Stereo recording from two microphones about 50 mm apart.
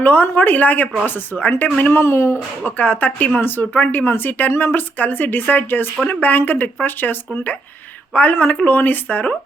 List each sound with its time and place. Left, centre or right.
0.0 s speech: left
1.9 s speech: left
2.6 s speech: left